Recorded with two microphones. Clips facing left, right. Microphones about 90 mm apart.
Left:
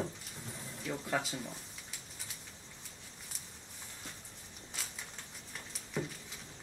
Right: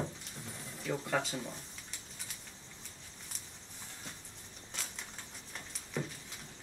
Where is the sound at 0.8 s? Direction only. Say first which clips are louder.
Right 2 dB; centre (ahead or behind).